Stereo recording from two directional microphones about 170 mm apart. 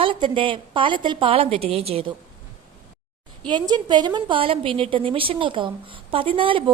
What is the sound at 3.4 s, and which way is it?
A woman's voice, 25° right (ahead or behind).